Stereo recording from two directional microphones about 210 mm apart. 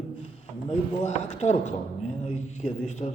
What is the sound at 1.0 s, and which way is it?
Speech, 35° left (ahead or behind).